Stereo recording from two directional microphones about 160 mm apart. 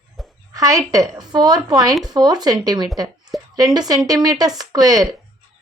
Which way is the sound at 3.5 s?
25° right (ahead or behind).